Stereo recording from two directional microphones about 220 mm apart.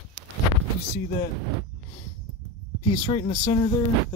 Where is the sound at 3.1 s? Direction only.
30° left (ahead or behind).